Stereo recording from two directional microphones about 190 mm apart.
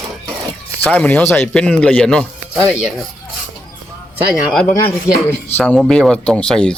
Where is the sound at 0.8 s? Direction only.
5° left (ahead or behind).